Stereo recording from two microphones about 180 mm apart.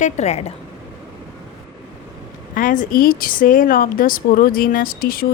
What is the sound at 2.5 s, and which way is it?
A woman's voice, 45° left (ahead or behind).